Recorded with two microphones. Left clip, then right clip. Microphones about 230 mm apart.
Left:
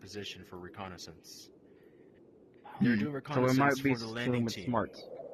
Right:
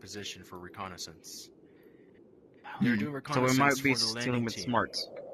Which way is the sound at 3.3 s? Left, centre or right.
Right.